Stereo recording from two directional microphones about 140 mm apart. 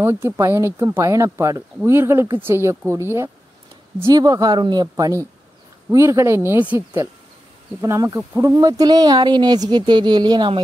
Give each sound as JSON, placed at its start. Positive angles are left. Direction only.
{"t": 0.0, "sound": "speech", "side_deg": -15}
{"t": 7.8, "sound": "speech", "side_deg": -25}